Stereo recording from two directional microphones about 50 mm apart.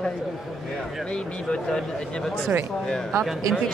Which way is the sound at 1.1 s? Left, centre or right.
Centre.